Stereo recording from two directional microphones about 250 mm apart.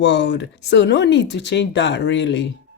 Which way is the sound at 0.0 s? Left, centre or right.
Left.